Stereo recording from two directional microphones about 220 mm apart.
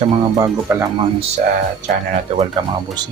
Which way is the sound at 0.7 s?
10° right (ahead or behind).